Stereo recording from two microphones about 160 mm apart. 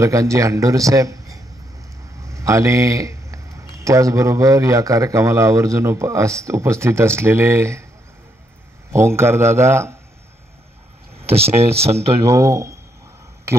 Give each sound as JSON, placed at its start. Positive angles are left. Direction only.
{"t": 0.0, "sound": "a man's voice", "side_deg": -20}
{"t": 8.9, "sound": "a man's voice", "side_deg": -15}
{"t": 11.3, "sound": "speech", "side_deg": -40}
{"t": 12.3, "sound": "a man's voice", "side_deg": -20}